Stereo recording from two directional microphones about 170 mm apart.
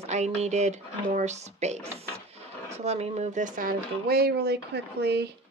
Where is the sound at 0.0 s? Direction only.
40° right (ahead or behind); by 5.3 s 75° right (ahead or behind).